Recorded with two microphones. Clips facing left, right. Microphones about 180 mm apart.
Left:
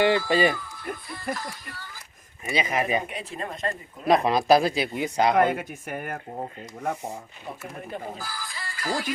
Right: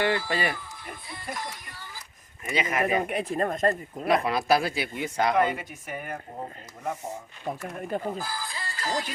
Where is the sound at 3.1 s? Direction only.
55° right (ahead or behind).